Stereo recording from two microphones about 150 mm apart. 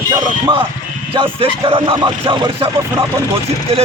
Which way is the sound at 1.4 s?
35° right (ahead or behind).